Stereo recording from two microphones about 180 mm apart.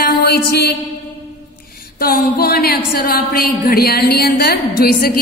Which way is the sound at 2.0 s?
55° left (ahead or behind).